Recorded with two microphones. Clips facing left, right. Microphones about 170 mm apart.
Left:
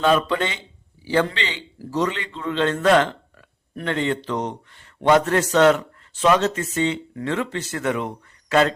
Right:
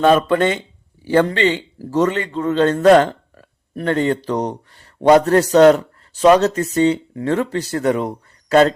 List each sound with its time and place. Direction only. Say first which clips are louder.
0.0 s a man's voice: right 6 dB; 50° right (ahead or behind)